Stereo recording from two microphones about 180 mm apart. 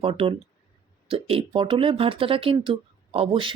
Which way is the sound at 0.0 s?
30° right (ahead or behind).